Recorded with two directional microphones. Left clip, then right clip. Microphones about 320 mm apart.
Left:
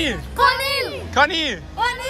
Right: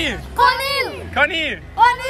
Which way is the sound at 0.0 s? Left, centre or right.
Centre.